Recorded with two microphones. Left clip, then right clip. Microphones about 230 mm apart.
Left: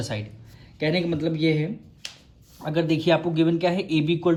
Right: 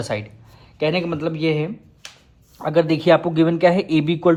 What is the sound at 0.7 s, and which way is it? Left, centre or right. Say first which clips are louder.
Speech: right 4 dB; right.